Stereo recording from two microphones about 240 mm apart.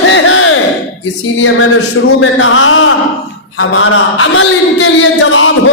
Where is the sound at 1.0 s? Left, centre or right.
Left.